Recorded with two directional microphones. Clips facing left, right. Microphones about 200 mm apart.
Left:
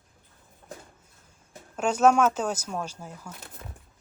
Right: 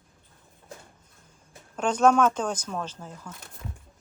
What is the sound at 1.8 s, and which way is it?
Speech, 5° left (ahead or behind).